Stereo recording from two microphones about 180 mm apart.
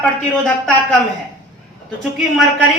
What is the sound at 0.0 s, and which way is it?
Speech, 5° left (ahead or behind).